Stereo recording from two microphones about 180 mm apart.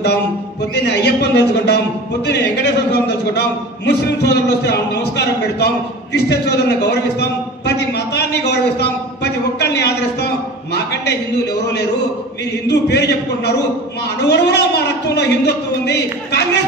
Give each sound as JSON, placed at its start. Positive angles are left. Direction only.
{"t": 0.8, "sound": "a man's voice", "side_deg": 65}
{"t": 6.1, "sound": "a sound", "side_deg": 65}
{"t": 11.6, "sound": "a man's voice", "side_deg": 70}